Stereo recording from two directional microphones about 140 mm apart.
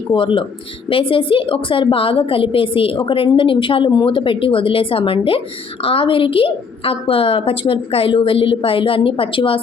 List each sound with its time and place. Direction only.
0.1 s a woman's voice: 35° left (ahead or behind)